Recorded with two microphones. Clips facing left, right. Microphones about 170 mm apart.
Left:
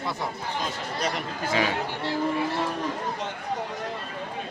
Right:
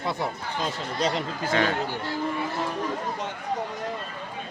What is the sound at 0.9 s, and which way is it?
Speech, 25° right (ahead or behind).